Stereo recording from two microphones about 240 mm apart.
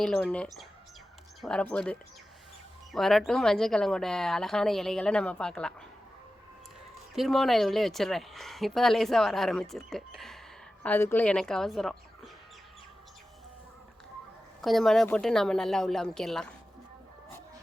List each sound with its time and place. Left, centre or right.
0.0 s speech: centre
7.2 s speech: centre
14.6 s speech: centre